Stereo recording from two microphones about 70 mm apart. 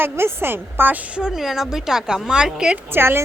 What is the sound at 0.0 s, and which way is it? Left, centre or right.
Speech, right.